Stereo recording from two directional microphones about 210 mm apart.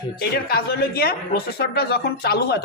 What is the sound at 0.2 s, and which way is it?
A man's voice, 45° left (ahead or behind).